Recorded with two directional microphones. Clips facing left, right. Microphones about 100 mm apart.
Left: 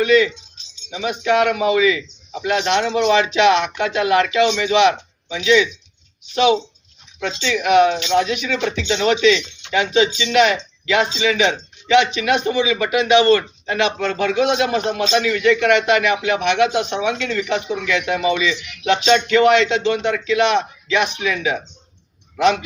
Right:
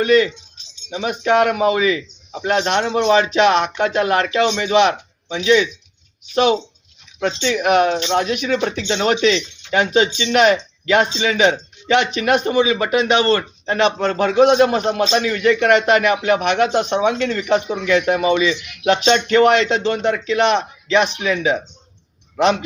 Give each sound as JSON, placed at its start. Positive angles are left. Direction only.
{"t": 0.0, "sound": "speech", "side_deg": -45}
{"t": 6.3, "sound": "speech", "side_deg": -45}
{"t": 18.9, "sound": "speech", "side_deg": -40}